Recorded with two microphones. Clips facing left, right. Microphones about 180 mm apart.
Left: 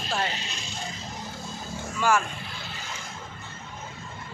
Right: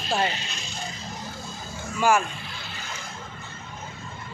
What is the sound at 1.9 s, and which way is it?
Speech, 10° right (ahead or behind).